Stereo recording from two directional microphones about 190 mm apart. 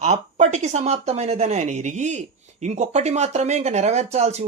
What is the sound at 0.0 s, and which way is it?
Speech, 35° right (ahead or behind).